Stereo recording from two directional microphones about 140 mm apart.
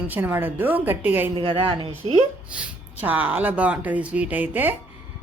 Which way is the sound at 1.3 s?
40° right (ahead or behind).